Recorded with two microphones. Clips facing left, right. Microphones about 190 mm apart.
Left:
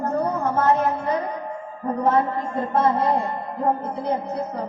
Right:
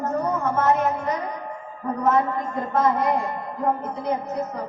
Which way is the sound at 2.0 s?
30° left (ahead or behind).